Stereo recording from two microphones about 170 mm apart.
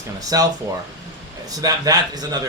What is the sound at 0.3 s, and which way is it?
Speech, 20° right (ahead or behind).